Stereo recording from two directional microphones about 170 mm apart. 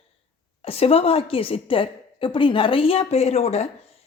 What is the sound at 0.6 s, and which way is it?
A woman's voice, 35° left (ahead or behind).